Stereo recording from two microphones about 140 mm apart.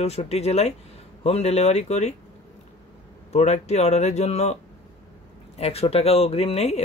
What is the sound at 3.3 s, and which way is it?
Speech, 50° left (ahead or behind).